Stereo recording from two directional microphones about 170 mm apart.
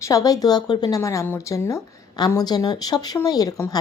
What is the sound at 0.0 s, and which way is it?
Speech, 20° left (ahead or behind).